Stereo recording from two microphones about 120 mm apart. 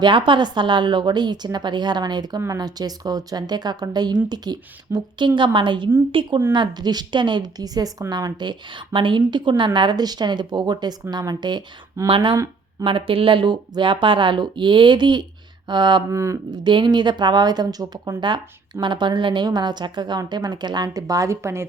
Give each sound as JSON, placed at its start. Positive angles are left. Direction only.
{"t": 0.0, "sound": "speech", "side_deg": -40}
{"t": 12.0, "sound": "speech", "side_deg": -45}
{"t": 16.1, "sound": "speech", "side_deg": -25}
{"t": 16.5, "sound": "speech", "side_deg": -40}